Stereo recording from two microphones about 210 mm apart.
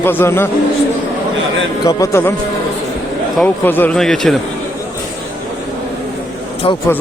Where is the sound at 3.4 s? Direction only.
10° left (ahead or behind).